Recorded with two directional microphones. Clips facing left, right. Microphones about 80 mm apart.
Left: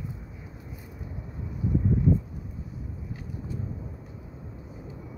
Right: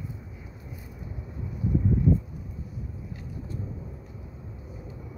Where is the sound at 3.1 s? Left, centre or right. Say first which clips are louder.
Left 2 dB; centre.